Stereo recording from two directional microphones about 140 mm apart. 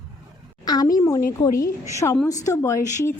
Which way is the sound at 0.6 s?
25° left (ahead or behind).